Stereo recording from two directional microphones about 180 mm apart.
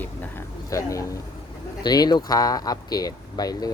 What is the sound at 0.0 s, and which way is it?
Speech, 10° left (ahead or behind).